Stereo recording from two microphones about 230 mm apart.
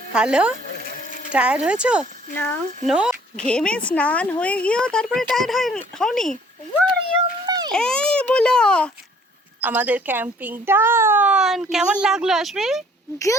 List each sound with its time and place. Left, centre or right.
0.1 s a child's voice: centre
2.3 s speech: centre
2.9 s a child's voice: centre
7.4 s a sound: centre
7.7 s a child's voice: centre
9.6 s a child's voice: centre